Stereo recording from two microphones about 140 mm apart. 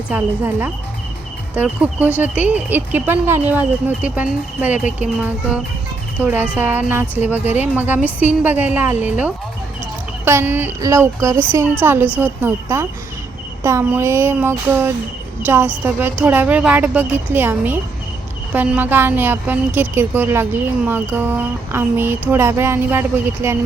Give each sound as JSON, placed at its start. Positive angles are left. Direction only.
{"t": 0.1, "sound": "a woman's voice", "side_deg": -10}